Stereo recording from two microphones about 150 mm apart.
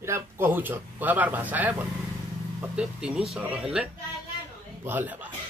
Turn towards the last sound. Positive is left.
turn(degrees=-10)  # may be behind; listen again after turning